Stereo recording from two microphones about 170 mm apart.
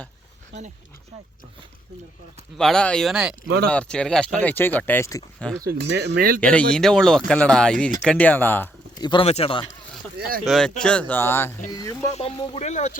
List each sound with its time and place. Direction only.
2.6 s speech: 5° left (ahead or behind)
5.6 s speech: 75° right (ahead or behind)
6.4 s speech: 5° left (ahead or behind)
9.0 s speech: 25° left (ahead or behind)
9.2 s speech: 35° left (ahead or behind)
10.4 s speech: centre (ahead or behind); by 11.9 s 20° left (ahead or behind)
12.1 s speech: 35° left (ahead or behind)